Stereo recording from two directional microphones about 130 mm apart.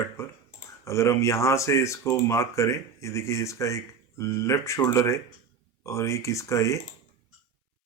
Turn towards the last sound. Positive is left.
turn(degrees=25)  # may be behind; listen again after turning